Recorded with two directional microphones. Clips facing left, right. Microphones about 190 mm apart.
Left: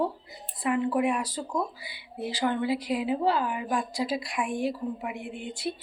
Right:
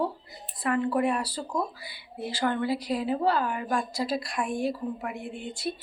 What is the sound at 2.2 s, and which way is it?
Speech, 15° left (ahead or behind).